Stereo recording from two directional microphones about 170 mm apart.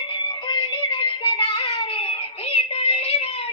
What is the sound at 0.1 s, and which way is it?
Music, 25° left (ahead or behind).